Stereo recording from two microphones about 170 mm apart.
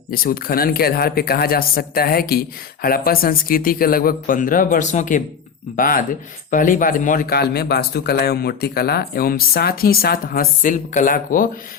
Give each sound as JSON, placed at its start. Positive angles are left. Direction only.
{"t": 0.1, "sound": "speech", "side_deg": 60}